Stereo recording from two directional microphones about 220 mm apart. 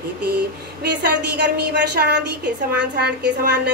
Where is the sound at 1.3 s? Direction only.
50° right (ahead or behind).